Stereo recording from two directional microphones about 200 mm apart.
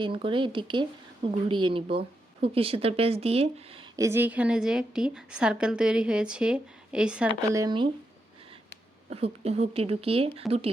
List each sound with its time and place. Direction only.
0.0 s speech: 25° right (ahead or behind)
3.9 s a woman's voice: 15° right (ahead or behind)
7.3 s speech: 20° right (ahead or behind)
9.0 s speech: 30° right (ahead or behind)